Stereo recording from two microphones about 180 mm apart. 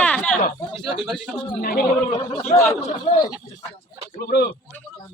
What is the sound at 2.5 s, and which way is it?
Speech, 15° left (ahead or behind).